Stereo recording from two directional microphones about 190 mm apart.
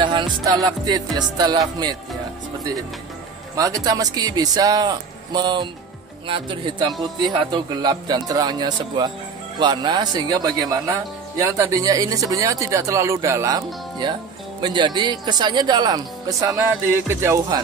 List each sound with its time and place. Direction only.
0.0 s speech: 25° right (ahead or behind)
3.5 s speech: 20° right (ahead or behind)